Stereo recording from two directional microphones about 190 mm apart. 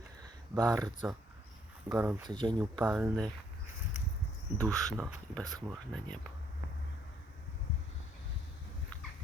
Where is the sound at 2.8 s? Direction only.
10° right (ahead or behind).